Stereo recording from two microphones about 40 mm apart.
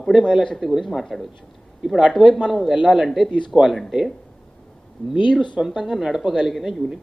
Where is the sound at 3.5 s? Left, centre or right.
Centre.